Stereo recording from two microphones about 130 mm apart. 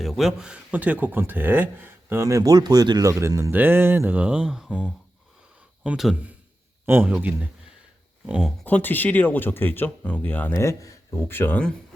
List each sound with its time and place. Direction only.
0.0 s speech: centre (ahead or behind)
6.8 s a man's voice: 15° right (ahead or behind)
8.6 s speech: 15° left (ahead or behind)
10.5 s speech: 25° left (ahead or behind)